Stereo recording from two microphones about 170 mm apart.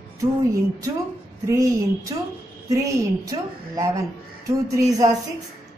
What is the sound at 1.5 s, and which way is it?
A woman's voice, 20° right (ahead or behind).